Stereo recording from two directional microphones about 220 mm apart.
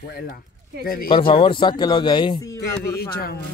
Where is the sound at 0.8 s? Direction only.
40° left (ahead or behind).